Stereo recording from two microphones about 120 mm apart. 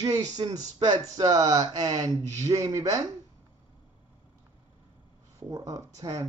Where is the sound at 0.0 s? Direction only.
30° right (ahead or behind).